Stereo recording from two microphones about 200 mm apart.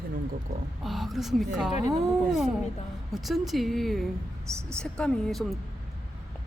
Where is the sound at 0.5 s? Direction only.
40° right (ahead or behind).